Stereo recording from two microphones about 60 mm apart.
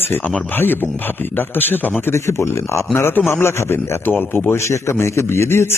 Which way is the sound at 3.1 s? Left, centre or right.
Left.